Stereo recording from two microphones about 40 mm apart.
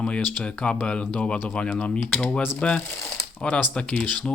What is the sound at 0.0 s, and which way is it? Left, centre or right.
Speech, left.